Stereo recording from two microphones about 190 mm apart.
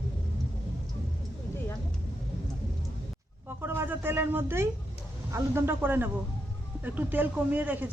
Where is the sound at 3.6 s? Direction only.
15° right (ahead or behind).